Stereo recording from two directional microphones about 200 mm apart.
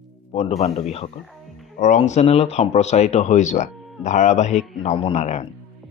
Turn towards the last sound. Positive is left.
turn(degrees=35)  # may be behind; listen again after turning